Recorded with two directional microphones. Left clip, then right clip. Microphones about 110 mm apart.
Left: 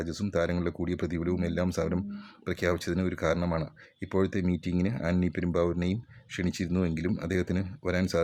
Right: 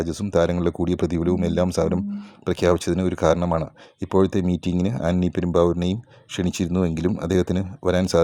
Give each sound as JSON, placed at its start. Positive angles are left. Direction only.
{"t": 0.0, "sound": "speech", "side_deg": -40}